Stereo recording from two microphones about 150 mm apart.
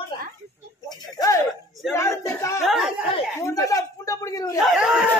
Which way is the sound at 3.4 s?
20° left (ahead or behind).